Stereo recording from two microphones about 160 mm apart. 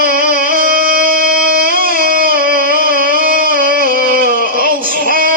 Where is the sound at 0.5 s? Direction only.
60° right (ahead or behind).